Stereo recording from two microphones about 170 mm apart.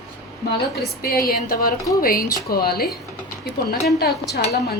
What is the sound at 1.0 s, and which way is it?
Speech, 60° left (ahead or behind).